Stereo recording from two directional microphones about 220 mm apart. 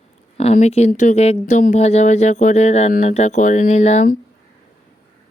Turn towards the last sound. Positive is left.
turn(degrees=30)  # may be behind; listen again after turning